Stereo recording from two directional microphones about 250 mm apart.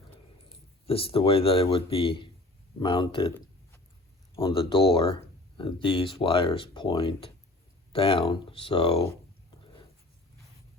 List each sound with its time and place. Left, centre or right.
0.9 s speech: left
4.4 s speech: left